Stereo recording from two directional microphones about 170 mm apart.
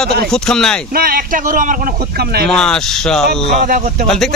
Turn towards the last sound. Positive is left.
turn(degrees=5)  # may be behind; listen again after turning